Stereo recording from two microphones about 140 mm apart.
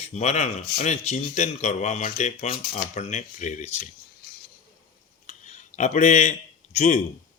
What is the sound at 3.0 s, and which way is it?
Speech, 60° left (ahead or behind).